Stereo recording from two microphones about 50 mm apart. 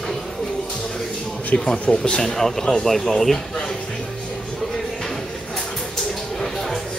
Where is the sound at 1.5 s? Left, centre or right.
Centre.